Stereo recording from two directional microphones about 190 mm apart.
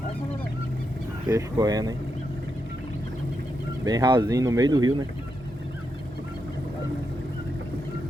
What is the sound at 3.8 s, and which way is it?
Speech, 20° right (ahead or behind).